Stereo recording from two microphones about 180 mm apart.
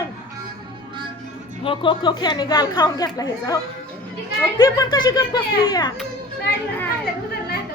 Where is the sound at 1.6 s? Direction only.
30° left (ahead or behind).